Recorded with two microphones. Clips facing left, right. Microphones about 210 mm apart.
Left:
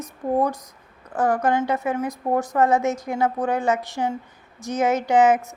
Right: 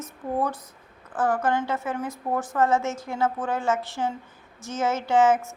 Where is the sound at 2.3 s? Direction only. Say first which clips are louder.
Left 5 dB; 40° left (ahead or behind).